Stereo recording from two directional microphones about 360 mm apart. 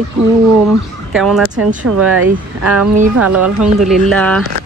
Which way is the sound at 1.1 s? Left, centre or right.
Centre.